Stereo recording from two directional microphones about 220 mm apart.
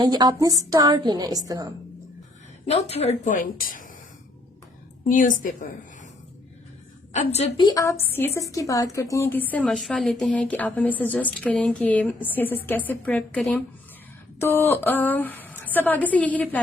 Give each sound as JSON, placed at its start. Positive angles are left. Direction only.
{"t": 0.0, "sound": "a sound", "side_deg": -20}
{"t": 0.7, "sound": "a woman's voice", "side_deg": -15}
{"t": 2.6, "sound": "a woman's voice", "side_deg": 30}
{"t": 5.0, "sound": "a woman's voice", "side_deg": 35}
{"t": 7.1, "sound": "a woman's voice", "side_deg": 30}